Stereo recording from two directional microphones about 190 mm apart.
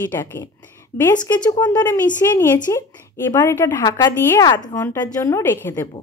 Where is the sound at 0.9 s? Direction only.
15° left (ahead or behind).